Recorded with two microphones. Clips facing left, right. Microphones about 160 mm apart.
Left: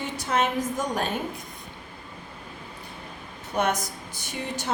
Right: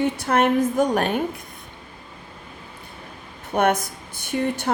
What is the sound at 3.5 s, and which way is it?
A woman's voice, 55° right (ahead or behind).